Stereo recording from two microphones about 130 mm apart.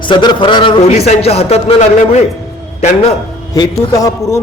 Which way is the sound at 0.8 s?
55° left (ahead or behind).